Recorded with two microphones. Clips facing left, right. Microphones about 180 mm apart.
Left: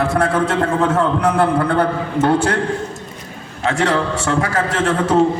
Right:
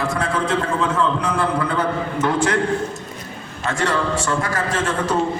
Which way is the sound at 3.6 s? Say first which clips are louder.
Left 4 dB; 70° left (ahead or behind).